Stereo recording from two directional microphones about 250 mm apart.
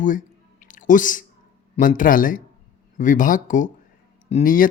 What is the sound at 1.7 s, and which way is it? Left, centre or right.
Speech, left.